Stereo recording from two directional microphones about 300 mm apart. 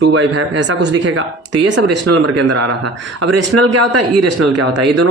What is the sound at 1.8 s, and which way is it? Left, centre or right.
Speech, right.